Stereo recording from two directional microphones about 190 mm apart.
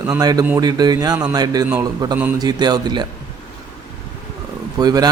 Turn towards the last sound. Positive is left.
turn(degrees=-20)  # may be behind; listen again after turning